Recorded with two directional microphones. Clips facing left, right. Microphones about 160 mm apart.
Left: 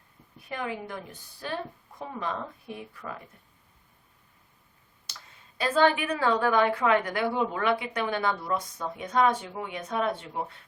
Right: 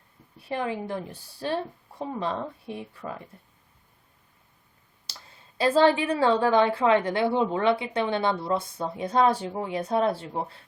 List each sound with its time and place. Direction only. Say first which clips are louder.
0.3 s a woman's voice: right 5 dB; 30° right (ahead or behind)
5.1 s clicking: right 1 dB; 30° right (ahead or behind)
5.5 s a woman's voice: right 3 dB; 30° right (ahead or behind)